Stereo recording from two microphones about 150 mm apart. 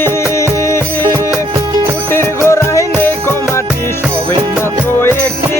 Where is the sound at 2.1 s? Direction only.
20° left (ahead or behind).